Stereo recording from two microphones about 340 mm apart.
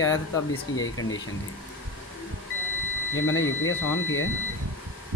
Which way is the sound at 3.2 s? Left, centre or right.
Left.